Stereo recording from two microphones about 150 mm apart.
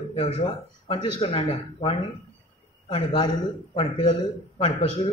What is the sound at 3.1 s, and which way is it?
A man's voice, 35° left (ahead or behind).